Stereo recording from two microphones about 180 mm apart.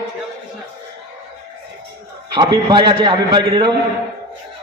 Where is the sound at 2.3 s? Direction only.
25° right (ahead or behind).